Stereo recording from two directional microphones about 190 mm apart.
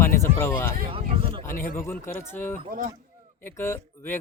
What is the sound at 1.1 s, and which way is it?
Speech, 30° right (ahead or behind).